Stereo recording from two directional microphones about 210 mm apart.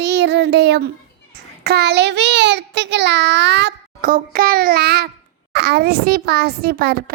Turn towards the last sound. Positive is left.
turn(degrees=-50)  # may be behind; listen again after turning